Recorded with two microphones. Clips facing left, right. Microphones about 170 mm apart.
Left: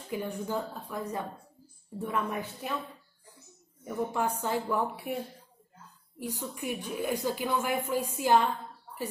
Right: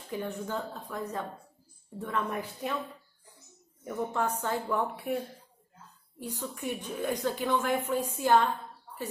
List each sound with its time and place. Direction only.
0.1 s a woman's voice: 10° left (ahead or behind)
3.8 s a woman's voice: 10° left (ahead or behind)